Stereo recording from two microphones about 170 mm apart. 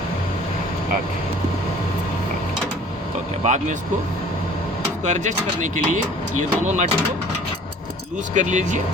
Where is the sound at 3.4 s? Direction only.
45° right (ahead or behind).